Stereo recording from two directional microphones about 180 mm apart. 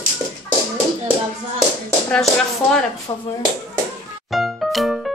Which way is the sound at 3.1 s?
20° left (ahead or behind).